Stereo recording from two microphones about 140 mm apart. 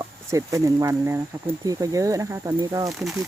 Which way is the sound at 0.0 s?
20° right (ahead or behind).